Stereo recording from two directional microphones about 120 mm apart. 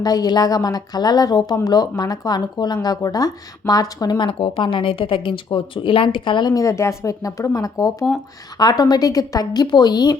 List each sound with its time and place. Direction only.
0.0 s speech: 30° left (ahead or behind)
4.3 s speech: 50° left (ahead or behind)